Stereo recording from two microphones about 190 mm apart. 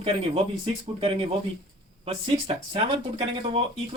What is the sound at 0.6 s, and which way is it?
Speech, 30° right (ahead or behind).